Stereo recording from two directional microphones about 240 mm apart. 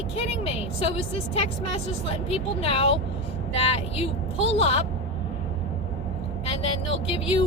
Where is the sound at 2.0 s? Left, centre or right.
Left.